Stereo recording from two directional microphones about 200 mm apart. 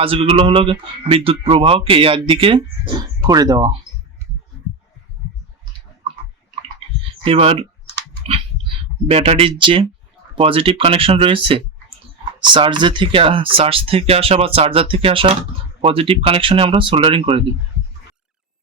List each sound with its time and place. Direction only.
0.0 s speech: 25° right (ahead or behind)
7.3 s speech: 30° right (ahead or behind)
8.3 s a sound: 30° right (ahead or behind)
10.3 s speech: 25° right (ahead or behind)